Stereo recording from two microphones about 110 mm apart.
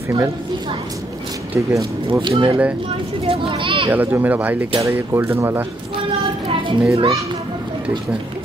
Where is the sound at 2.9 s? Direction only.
55° right (ahead or behind).